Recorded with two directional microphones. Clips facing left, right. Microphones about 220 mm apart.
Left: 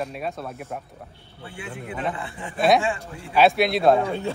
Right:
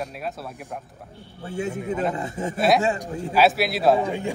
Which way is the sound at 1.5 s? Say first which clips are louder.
Right 8 dB; 40° right (ahead or behind).